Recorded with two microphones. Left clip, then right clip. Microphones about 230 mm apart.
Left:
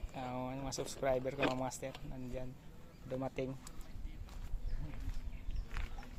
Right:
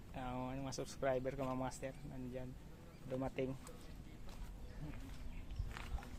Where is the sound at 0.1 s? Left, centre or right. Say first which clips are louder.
Left 3 dB; left.